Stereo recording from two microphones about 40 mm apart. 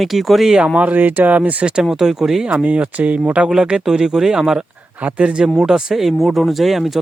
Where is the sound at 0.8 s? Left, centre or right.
Right.